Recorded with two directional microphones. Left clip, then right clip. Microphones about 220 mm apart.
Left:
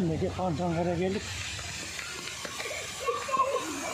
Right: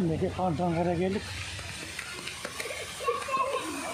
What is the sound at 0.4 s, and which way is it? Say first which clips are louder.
Speech: right 3 dB; 20° right (ahead or behind).